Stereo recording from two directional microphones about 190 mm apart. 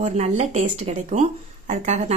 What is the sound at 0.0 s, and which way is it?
Speech, 35° right (ahead or behind).